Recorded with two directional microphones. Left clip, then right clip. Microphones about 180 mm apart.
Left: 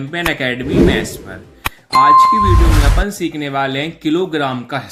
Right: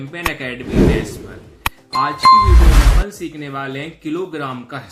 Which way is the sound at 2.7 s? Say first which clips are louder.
Left 3 dB; centre (ahead or behind).